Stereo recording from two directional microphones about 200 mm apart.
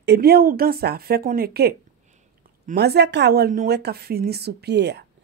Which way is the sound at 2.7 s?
55° right (ahead or behind).